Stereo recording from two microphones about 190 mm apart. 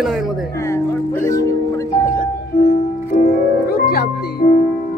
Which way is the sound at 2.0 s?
55° left (ahead or behind).